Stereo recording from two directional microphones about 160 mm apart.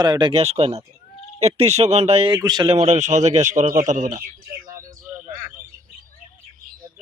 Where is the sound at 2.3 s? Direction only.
25° right (ahead or behind).